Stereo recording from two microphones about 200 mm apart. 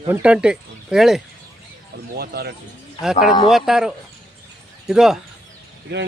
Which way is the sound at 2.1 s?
50° right (ahead or behind).